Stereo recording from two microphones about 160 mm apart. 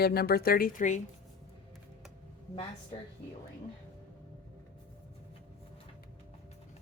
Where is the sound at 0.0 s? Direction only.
80° left; by 1.0 s 55° left (ahead or behind).